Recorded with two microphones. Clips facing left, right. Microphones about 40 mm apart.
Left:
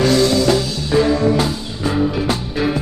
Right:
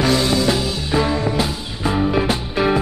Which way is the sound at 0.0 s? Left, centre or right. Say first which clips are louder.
Left 3 dB; centre.